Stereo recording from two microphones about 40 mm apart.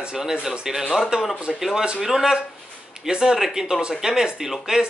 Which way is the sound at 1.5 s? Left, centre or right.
Centre.